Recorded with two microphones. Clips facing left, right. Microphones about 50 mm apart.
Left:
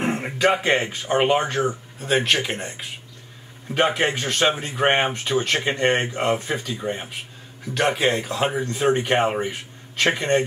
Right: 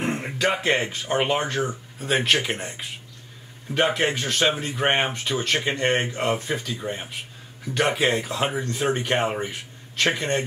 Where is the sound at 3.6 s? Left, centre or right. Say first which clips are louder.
Left 1 dB; centre.